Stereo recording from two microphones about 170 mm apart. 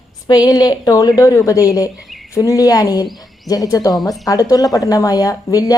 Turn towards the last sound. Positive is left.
turn(degrees=20)  # may be behind; listen again after turning